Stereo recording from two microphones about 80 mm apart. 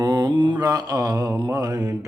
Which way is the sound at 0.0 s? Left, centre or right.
Right.